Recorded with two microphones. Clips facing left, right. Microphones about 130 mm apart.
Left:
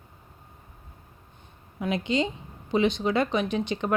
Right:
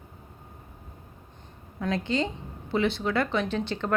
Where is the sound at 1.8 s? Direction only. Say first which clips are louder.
Left 1 dB; 15° left (ahead or behind).